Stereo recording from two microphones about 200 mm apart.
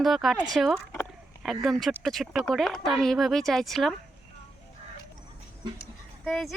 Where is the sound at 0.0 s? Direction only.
Centre (ahead or behind).